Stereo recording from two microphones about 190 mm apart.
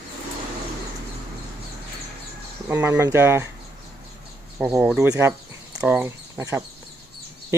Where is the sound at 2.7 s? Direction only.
10° right (ahead or behind).